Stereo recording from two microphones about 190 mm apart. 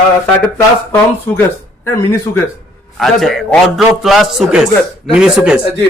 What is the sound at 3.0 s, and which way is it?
A man's voice, centre (ahead or behind).